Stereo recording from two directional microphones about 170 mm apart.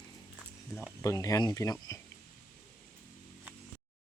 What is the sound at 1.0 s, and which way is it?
Speech, 20° left (ahead or behind).